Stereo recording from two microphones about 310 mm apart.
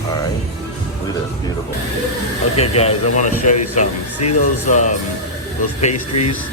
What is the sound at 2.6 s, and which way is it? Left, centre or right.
Speech, centre.